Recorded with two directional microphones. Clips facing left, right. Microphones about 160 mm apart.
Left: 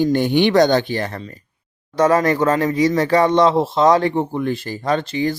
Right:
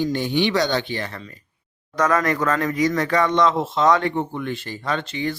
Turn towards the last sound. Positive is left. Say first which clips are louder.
# left 6 dB
turn(degrees=40)  # may be behind; listen again after turning